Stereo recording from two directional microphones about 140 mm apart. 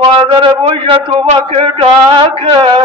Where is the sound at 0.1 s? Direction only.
35° right (ahead or behind).